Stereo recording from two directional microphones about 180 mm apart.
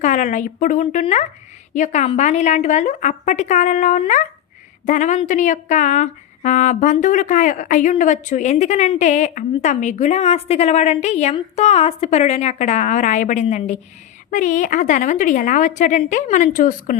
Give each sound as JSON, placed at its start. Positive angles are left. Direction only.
{"t": 0.0, "sound": "a woman's voice", "side_deg": 45}